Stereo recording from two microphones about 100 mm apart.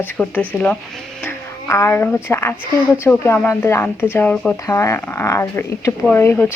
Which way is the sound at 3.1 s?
15° left (ahead or behind).